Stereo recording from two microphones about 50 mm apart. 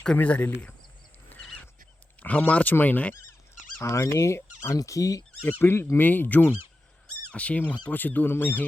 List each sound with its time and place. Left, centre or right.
0.2 s speech: left
2.2 s speech: left
3.8 s speech: left
5.5 s speech: left
6.0 s speech: left
7.3 s speech: left